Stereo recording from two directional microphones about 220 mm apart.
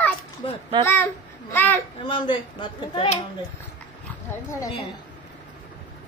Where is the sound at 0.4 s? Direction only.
20° left (ahead or behind).